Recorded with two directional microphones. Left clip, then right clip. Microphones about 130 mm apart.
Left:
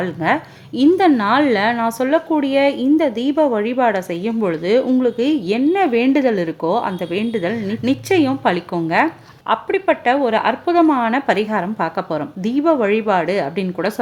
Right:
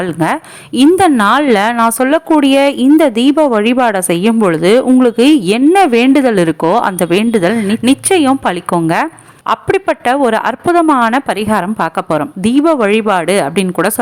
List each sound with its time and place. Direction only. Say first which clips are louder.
0.0 s a woman's voice: right 4 dB; 50° right (ahead or behind)
9.5 s a woman's voice: right 4 dB; 45° right (ahead or behind)